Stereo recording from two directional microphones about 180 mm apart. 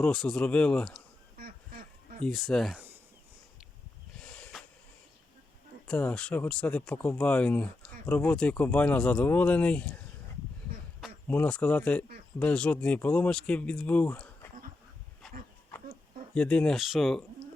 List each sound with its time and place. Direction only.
0.0 s speech: centre (ahead or behind)
1.4 s duck: 55° right (ahead or behind)
2.2 s speech: centre (ahead or behind)
4.2 s a sound: 5° left (ahead or behind)
5.9 s speech: 5° left (ahead or behind)
11.3 s speech: 5° left (ahead or behind)
15.2 s a sound: centre (ahead or behind)
16.3 s speech: 5° left (ahead or behind)